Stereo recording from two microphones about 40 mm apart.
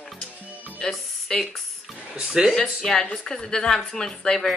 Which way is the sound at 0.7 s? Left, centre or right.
Centre.